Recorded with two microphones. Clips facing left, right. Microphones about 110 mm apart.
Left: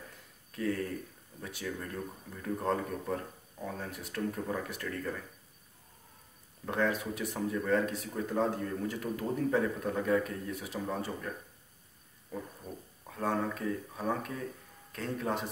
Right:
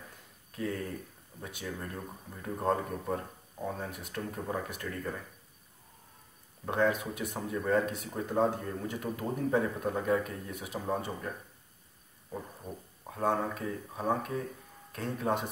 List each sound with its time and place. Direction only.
0.6 s a man's voice: 20° right (ahead or behind)
6.6 s a man's voice: 20° right (ahead or behind)